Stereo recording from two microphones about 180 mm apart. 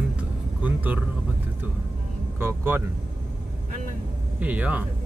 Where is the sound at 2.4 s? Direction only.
10° right (ahead or behind).